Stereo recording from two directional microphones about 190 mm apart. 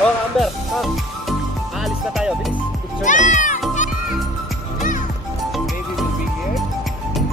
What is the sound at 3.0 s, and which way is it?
Music, 40° left (ahead or behind).